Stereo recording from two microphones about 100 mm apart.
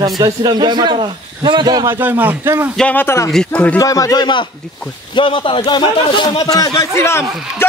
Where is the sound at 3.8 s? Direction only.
35° left (ahead or behind).